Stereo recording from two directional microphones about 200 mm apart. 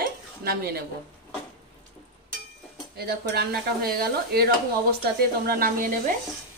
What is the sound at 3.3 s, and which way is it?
Stir, 50° right (ahead or behind).